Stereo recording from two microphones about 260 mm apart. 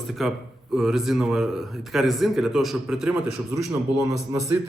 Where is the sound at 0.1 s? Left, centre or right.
Centre.